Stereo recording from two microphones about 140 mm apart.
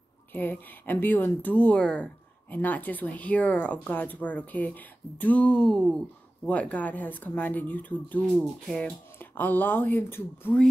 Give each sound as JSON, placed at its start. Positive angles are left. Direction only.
{"t": 0.3, "sound": "speech", "side_deg": 15}
{"t": 8.3, "sound": "speech", "side_deg": 0}